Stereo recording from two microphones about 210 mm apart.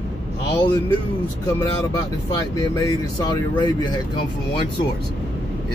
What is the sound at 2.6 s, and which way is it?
Speech, 15° left (ahead or behind).